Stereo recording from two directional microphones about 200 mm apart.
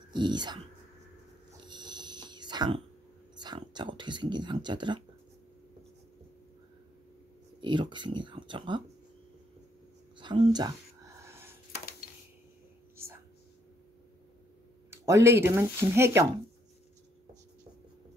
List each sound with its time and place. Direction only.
0.1 s speech: 20° right (ahead or behind)
1.7 s a sound: 20° right (ahead or behind)
3.3 s speech: 20° right (ahead or behind)
7.6 s speech: 25° right (ahead or behind)
10.1 s speech: 25° right (ahead or behind)
11.1 s a sound: 10° right (ahead or behind)
12.9 s whispering: 10° right (ahead or behind)
14.9 s speech: 15° right (ahead or behind)